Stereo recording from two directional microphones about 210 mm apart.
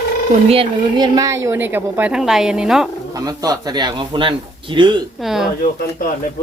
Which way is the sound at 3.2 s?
15° right (ahead or behind).